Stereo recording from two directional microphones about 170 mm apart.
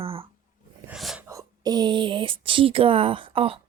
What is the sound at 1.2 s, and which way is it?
Speech, 20° right (ahead or behind).